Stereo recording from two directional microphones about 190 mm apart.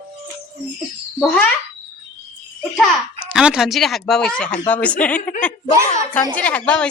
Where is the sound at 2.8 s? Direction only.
Centre (ahead or behind).